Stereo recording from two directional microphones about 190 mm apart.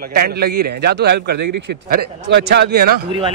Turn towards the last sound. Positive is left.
turn(degrees=-60)  # may be behind; listen again after turning